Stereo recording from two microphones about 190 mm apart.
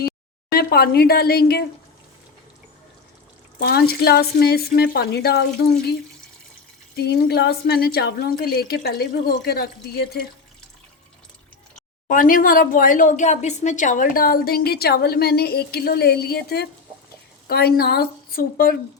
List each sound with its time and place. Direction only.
0.5 s a woman's voice: 55° left (ahead or behind)
3.6 s a woman's voice: 55° left (ahead or behind)
12.0 s a woman's voice: 45° left (ahead or behind)